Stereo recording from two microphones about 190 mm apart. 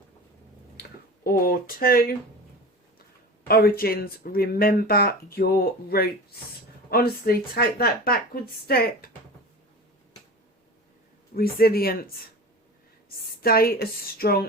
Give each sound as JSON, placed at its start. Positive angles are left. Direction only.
{"t": 0.8, "sound": "speech", "side_deg": 50}
{"t": 3.5, "sound": "speech", "side_deg": 50}
{"t": 11.3, "sound": "speech", "side_deg": 50}
{"t": 13.4, "sound": "speech", "side_deg": 50}